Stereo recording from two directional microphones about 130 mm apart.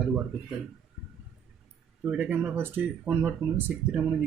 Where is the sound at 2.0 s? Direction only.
10° right (ahead or behind).